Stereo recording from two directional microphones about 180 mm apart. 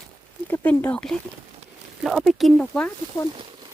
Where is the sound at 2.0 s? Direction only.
Centre (ahead or behind).